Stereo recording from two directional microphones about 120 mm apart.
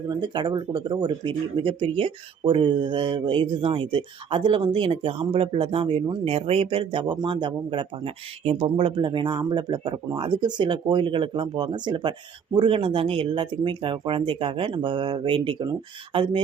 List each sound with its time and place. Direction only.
0.1 s speech: 40° right (ahead or behind)